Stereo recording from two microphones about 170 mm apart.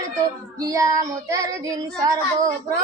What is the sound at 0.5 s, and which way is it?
Speech, 20° right (ahead or behind).